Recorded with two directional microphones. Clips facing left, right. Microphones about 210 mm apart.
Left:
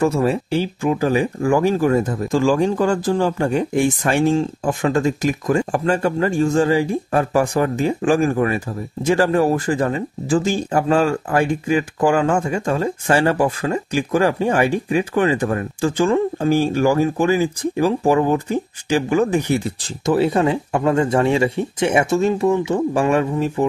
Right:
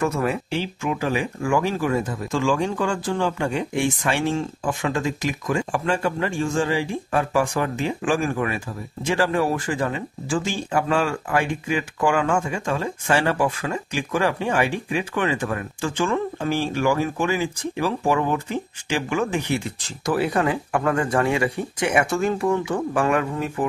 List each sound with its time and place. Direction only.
0.0 s speech: 30° left (ahead or behind)
20.1 s speech: 25° left (ahead or behind)